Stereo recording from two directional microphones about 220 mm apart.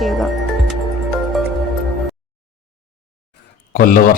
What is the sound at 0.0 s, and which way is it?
Speech, centre (ahead or behind).